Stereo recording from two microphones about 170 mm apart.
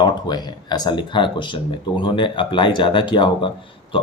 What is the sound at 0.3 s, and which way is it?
Speech, 25° left (ahead or behind).